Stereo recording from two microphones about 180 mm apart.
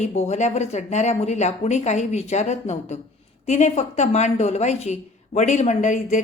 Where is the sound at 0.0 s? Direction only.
40° left (ahead or behind).